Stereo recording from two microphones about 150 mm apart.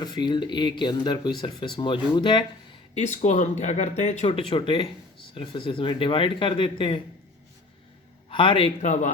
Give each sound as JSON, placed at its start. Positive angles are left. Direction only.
{"t": 0.0, "sound": "speech", "side_deg": 30}
{"t": 2.9, "sound": "speech", "side_deg": 50}
{"t": 4.3, "sound": "speech", "side_deg": 35}
{"t": 8.3, "sound": "a man's voice", "side_deg": 35}
{"t": 8.8, "sound": "speech", "side_deg": 50}